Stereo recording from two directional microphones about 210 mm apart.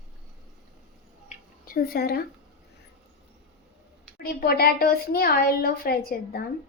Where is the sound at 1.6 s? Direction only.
45° left (ahead or behind).